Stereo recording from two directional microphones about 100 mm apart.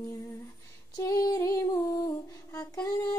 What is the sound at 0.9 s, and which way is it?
Female singing, 35° left (ahead or behind).